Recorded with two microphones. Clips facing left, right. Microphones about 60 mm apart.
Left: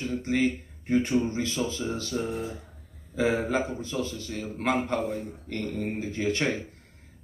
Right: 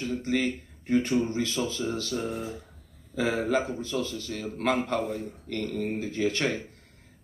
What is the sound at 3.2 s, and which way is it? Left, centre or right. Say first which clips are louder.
Speech: left 1 dB; centre.